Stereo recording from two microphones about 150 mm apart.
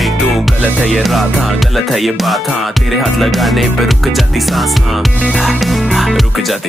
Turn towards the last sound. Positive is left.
turn(degrees=0)  # may be behind; listen again after turning